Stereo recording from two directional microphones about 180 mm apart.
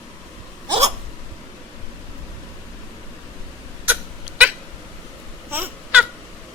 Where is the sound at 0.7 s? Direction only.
35° right (ahead or behind).